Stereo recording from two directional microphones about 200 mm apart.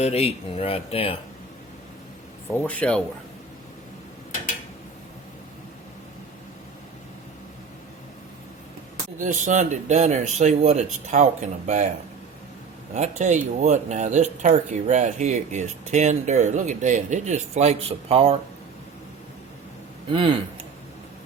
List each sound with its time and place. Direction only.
0.0 s speech: 30° left (ahead or behind)
2.6 s speech: 5° left (ahead or behind)
9.1 s speech: 40° right (ahead or behind)
12.9 s speech: 35° right (ahead or behind)